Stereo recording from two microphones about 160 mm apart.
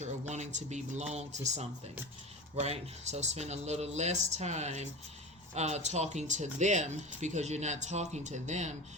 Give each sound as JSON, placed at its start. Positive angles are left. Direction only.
{"t": 0.0, "sound": "speech", "side_deg": -45}